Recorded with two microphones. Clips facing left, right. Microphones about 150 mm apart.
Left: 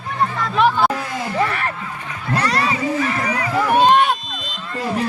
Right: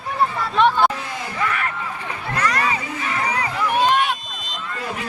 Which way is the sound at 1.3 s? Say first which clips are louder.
Left 3 dB; 35° left (ahead or behind).